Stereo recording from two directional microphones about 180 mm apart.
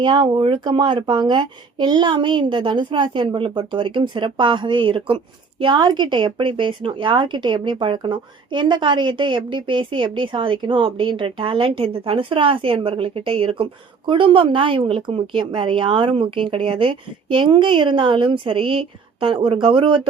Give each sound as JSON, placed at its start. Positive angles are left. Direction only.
{"t": 0.0, "sound": "speech", "side_deg": -25}